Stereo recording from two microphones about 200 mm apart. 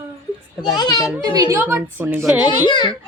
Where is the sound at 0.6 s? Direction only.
20° left (ahead or behind).